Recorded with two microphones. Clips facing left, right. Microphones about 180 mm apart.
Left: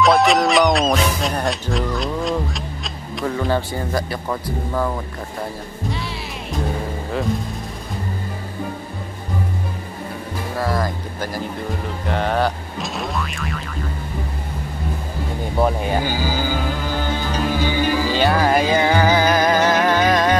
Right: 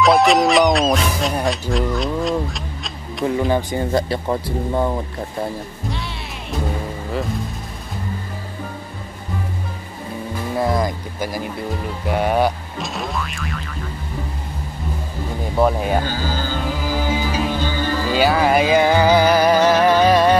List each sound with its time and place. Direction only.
0.0 s speech: centre (ahead or behind)
3.3 s speech: 15° right (ahead or behind)
5.9 s music: centre (ahead or behind)
10.6 s speech: 15° right (ahead or behind)
12.7 s boing: centre (ahead or behind)
15.6 s speech: 5° right (ahead or behind)
16.0 s speech: 10° left (ahead or behind)
16.6 s music: 5° right (ahead or behind)
17.5 s music: 10° left (ahead or behind)
18.1 s music: 5° right (ahead or behind)